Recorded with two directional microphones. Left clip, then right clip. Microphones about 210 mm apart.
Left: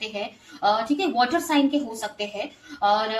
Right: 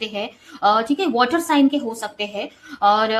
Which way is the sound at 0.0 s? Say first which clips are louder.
Right 4 dB; 35° right (ahead or behind).